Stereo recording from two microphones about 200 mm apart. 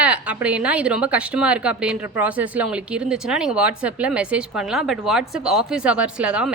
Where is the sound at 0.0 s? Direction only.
5° right (ahead or behind).